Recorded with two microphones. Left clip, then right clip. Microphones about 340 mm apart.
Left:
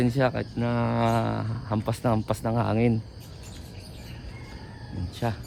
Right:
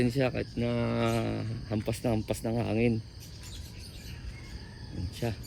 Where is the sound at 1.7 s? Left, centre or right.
Left.